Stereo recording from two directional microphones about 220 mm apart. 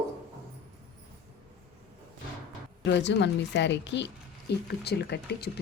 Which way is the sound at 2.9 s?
55° left (ahead or behind).